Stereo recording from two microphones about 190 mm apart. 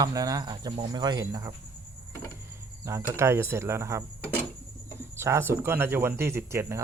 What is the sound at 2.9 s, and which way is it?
Speech, 15° right (ahead or behind).